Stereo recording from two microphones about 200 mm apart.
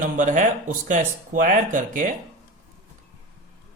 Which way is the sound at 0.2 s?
40° right (ahead or behind).